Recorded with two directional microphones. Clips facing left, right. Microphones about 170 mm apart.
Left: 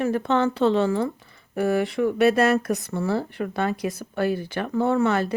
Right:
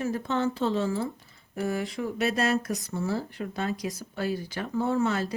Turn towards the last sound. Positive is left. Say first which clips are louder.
# left 5 dB
turn(degrees=60)  # may be behind; listen again after turning